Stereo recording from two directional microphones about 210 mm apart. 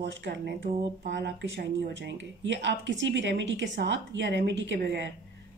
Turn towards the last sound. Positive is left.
turn(degrees=-55)  # may be behind; listen again after turning